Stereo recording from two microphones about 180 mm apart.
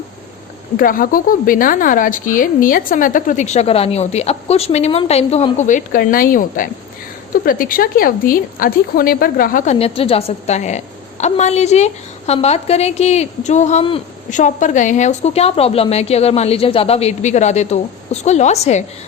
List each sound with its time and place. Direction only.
0.8 s a woman's voice: 50° left (ahead or behind)
9.7 s a woman's voice: 30° left (ahead or behind)